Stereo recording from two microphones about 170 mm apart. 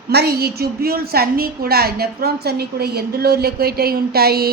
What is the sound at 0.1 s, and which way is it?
A woman's voice, 70° right (ahead or behind).